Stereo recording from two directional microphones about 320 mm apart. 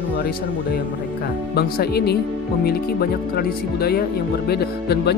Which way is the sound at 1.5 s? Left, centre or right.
Left.